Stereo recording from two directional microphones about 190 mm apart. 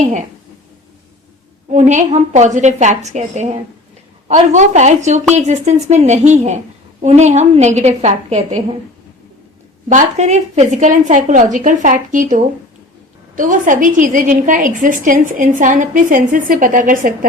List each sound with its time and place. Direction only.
0.0 s a sound: 40° right (ahead or behind)
1.7 s a woman's voice: 40° right (ahead or behind)
9.9 s a woman's voice: 40° right (ahead or behind)